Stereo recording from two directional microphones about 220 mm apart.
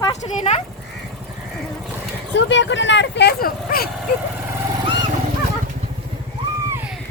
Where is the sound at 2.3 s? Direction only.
55° left (ahead or behind).